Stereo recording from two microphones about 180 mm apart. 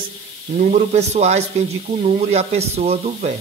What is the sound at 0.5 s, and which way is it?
Speech, 45° right (ahead or behind).